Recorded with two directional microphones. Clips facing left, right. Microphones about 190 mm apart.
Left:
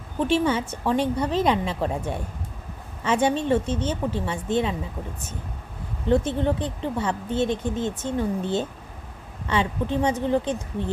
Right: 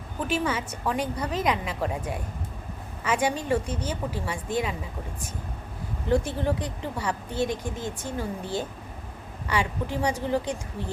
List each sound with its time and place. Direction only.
0.2 s speech: 30° left (ahead or behind)
3.0 s speech: 25° left (ahead or behind)
6.1 s speech: 20° left (ahead or behind)